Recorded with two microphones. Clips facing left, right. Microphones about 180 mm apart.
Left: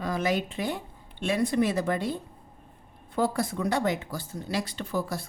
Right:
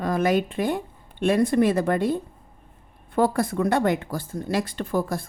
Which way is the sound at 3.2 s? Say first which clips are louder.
Right 5 dB; 55° right (ahead or behind).